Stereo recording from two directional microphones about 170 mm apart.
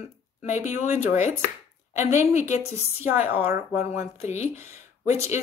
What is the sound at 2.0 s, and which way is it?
Speech, 45° left (ahead or behind).